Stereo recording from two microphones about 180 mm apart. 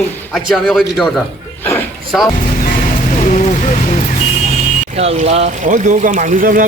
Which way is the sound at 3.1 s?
45° left (ahead or behind).